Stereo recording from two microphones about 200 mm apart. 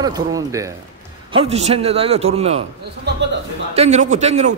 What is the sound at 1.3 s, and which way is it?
A man's voice, 30° right (ahead or behind).